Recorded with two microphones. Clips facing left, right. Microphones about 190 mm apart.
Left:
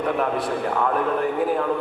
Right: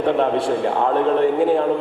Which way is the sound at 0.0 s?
25° right (ahead or behind).